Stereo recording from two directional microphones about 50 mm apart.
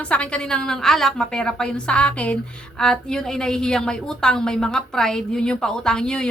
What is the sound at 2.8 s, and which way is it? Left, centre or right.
A woman's voice, centre.